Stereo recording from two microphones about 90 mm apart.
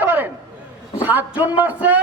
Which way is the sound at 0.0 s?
20° right (ahead or behind).